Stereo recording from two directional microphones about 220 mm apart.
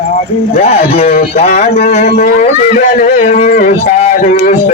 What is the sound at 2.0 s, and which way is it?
Speech, 45° left (ahead or behind).